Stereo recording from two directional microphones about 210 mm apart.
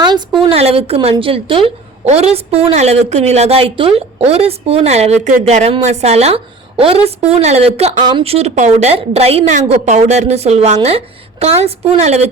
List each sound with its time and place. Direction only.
0.1 s a woman's voice: 20° right (ahead or behind)